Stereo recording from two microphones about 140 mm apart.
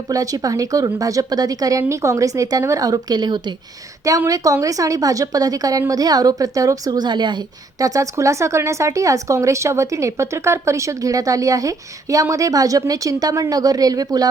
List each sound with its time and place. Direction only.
0.1 s a woman's voice: 25° right (ahead or behind)